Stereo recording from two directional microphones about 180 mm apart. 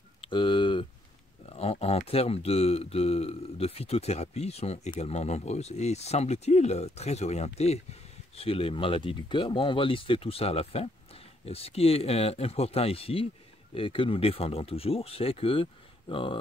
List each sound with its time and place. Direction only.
0.2 s speech: 25° left (ahead or behind)